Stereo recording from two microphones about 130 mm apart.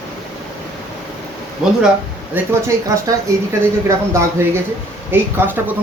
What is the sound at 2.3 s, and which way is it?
Speech, 20° right (ahead or behind).